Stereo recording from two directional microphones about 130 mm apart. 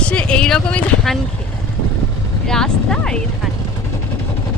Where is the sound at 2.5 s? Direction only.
5° left (ahead or behind).